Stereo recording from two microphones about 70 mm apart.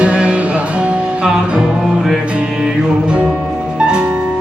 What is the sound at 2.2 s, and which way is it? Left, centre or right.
Music, centre.